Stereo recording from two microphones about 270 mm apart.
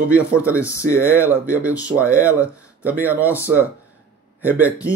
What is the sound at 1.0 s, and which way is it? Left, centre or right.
Speech, centre.